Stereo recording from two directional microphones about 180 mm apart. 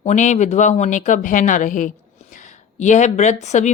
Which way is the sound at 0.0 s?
40° left (ahead or behind).